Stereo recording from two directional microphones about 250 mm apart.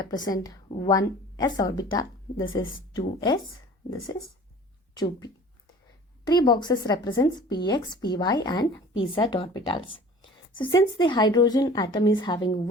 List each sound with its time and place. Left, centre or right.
0.0 s speech: centre
2.5 s a woman's voice: left
3.2 s speech: centre
6.2 s speech: centre